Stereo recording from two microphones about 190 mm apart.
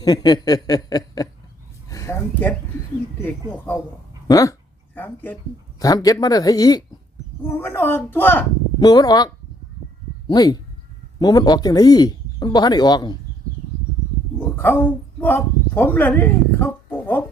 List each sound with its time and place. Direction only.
0.0 s a woman's voice: 20° left (ahead or behind)
13.5 s a sound: 45° right (ahead or behind)
14.3 s a woman's voice: 10° left (ahead or behind)